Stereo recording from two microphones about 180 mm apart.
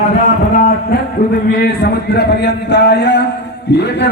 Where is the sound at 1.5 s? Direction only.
60° left (ahead or behind).